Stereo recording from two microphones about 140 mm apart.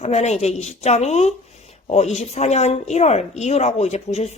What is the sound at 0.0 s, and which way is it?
A woman's voice, 50° left (ahead or behind).